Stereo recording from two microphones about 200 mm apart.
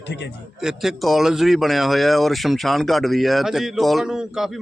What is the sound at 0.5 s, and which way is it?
Speech, centre (ahead or behind).